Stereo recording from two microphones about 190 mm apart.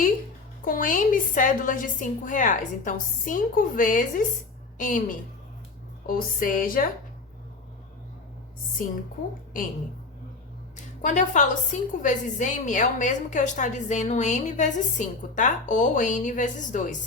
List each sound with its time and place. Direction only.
0.6 s a woman's voice: 45° left (ahead or behind)
11.0 s a woman's voice: 40° left (ahead or behind)